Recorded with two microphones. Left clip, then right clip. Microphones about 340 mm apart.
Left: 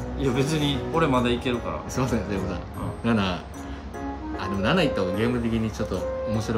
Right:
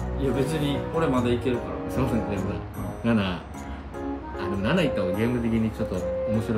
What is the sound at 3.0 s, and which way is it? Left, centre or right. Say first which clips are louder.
Speech: left 1 dB; centre.